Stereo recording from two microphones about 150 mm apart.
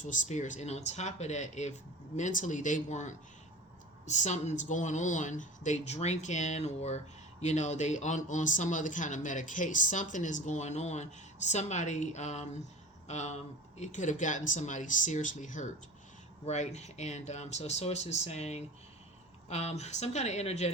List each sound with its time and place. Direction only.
0.0 s a woman's voice: 55° left (ahead or behind)